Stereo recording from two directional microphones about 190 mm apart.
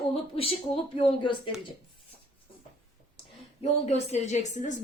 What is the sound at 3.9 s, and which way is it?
Speech, 35° left (ahead or behind).